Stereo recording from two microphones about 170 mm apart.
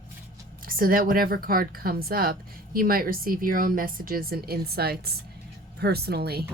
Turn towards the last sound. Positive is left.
turn(degrees=-70)  # may be behind; listen again after turning